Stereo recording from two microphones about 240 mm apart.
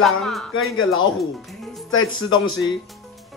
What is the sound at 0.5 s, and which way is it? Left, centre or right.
Speech, left.